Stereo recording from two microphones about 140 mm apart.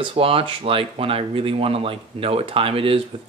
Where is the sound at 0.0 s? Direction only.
40° right (ahead or behind).